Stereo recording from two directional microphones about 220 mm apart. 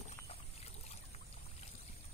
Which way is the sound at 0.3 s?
30° left (ahead or behind).